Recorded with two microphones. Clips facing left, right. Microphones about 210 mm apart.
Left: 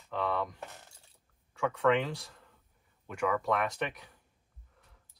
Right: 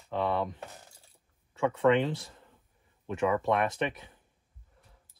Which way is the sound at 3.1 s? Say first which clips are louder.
Right 3 dB; 25° right (ahead or behind).